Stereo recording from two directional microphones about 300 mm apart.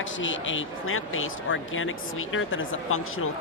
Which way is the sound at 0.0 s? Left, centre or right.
Left.